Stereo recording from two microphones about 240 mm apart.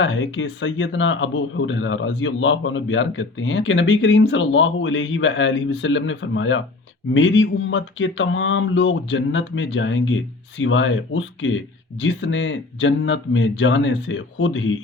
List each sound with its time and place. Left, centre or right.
0.0 s speech: left